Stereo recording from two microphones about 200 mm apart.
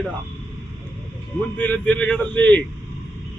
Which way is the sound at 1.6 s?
5° left (ahead or behind).